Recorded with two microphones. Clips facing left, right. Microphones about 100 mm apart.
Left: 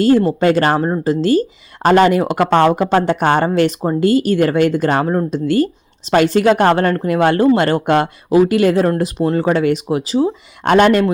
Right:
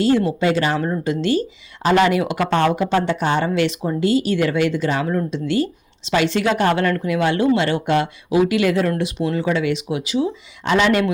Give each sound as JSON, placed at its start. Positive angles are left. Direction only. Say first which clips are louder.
{"t": 0.0, "sound": "speech", "louder": "left 5 dB", "side_deg": 45}
{"t": 0.8, "sound": "speech", "louder": "left 5 dB", "side_deg": 35}
{"t": 10.7, "sound": "speech", "louder": "left 6 dB", "side_deg": 50}